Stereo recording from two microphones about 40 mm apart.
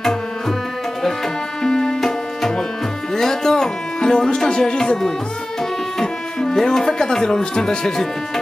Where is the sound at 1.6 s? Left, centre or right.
Centre.